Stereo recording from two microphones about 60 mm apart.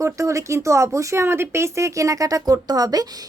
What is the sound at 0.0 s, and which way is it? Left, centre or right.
Speech, right.